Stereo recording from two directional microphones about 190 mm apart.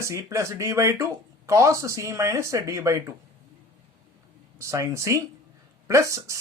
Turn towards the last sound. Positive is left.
turn(degrees=-15)  # may be behind; listen again after turning